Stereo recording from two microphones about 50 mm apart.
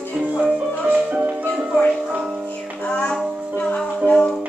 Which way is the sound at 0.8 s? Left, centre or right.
Right.